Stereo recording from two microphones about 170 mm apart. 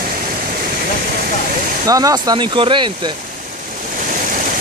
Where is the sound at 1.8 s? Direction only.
20° right (ahead or behind).